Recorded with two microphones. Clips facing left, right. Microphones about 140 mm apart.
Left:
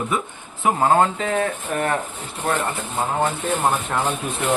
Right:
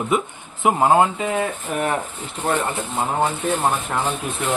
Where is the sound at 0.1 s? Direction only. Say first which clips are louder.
Right 4 dB; 20° right (ahead or behind).